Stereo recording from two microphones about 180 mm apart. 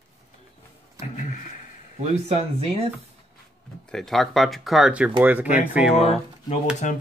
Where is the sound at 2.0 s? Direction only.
35° right (ahead or behind).